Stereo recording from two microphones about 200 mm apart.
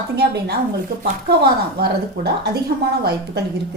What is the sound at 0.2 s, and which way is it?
A woman's voice, 50° right (ahead or behind).